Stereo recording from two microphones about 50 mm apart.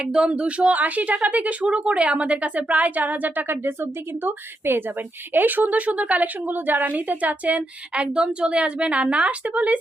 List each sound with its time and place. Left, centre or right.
0.0 s a woman's voice: right
4.2 s a woman's voice: right